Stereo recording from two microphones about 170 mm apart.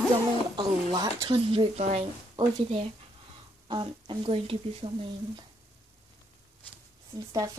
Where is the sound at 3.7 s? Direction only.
30° right (ahead or behind).